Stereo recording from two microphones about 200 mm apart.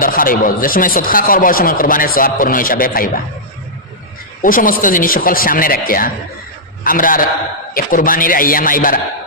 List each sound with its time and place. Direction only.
0.0 s speech: 45° left (ahead or behind)
4.4 s speech: 45° left (ahead or behind)